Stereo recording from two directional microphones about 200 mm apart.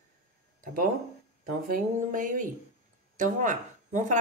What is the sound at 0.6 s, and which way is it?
Speech, 45° right (ahead or behind).